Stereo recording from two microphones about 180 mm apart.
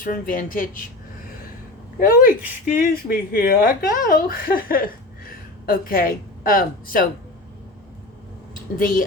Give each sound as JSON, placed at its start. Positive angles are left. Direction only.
{"t": 0.0, "sound": "speech", "side_deg": 50}
{"t": 2.0, "sound": "speech", "side_deg": 55}
{"t": 8.8, "sound": "speech", "side_deg": 50}